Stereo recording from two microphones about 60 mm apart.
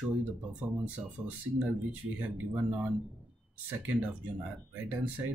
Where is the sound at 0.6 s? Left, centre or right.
Right.